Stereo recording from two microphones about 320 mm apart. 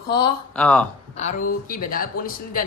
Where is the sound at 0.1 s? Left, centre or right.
Centre.